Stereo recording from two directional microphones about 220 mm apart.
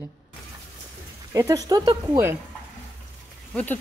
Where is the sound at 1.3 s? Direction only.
15° right (ahead or behind).